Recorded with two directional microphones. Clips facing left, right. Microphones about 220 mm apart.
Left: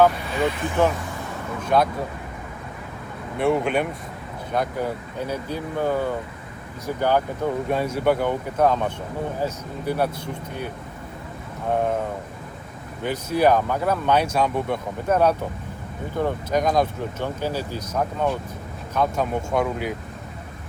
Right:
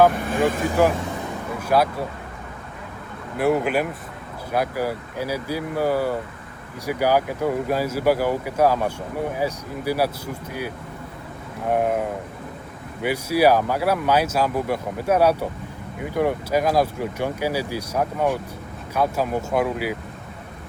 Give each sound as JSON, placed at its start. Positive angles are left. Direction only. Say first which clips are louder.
{"t": 0.2, "sound": "speech", "louder": "right 3 dB", "side_deg": -50}
{"t": 1.6, "sound": "speech", "louder": "even", "side_deg": -5}
{"t": 3.3, "sound": "speech", "louder": "right 1 dB", "side_deg": -5}
{"t": 11.7, "sound": "speech", "louder": "right 1 dB", "side_deg": -10}
{"t": 13.0, "sound": "speech", "louder": "right 2 dB", "side_deg": -10}